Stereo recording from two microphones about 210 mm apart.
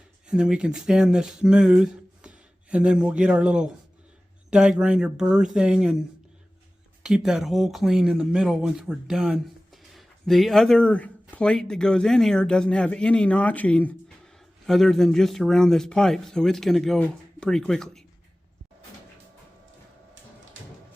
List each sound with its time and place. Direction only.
0.3 s speech: 5° right (ahead or behind)